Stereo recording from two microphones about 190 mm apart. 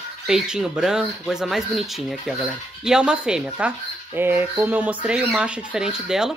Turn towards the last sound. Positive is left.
turn(degrees=-5)  # may be behind; listen again after turning